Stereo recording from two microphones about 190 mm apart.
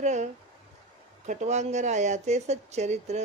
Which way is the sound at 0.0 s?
40° right (ahead or behind).